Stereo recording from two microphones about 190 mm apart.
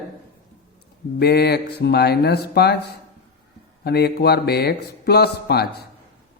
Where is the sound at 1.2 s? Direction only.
55° left (ahead or behind).